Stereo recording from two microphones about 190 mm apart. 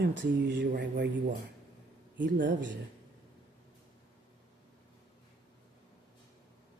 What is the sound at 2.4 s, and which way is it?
Speech, 70° right (ahead or behind).